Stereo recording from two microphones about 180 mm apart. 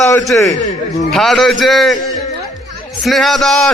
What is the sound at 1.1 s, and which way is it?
Speech, centre (ahead or behind).